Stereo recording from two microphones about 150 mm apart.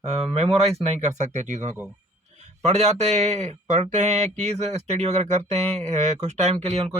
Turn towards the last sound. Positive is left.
turn(degrees=-45)  # may be behind; listen again after turning